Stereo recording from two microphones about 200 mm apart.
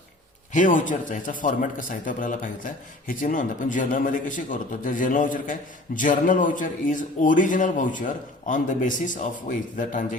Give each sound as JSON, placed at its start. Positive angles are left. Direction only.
{"t": 0.5, "sound": "a man's voice", "side_deg": 40}